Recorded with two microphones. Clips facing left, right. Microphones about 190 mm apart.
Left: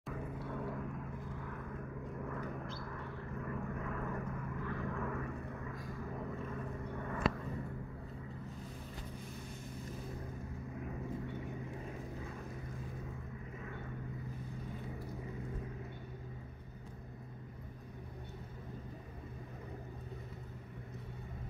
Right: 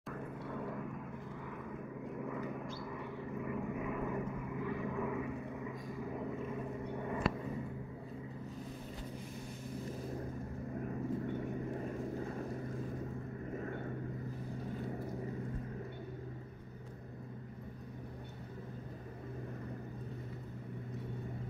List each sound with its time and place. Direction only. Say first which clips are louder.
0.1 s vehicle: even; centre (ahead or behind)
2.2 s vehicle: right 2 dB; 5° right (ahead or behind)